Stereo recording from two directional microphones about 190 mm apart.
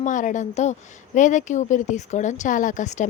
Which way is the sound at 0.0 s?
40° left (ahead or behind).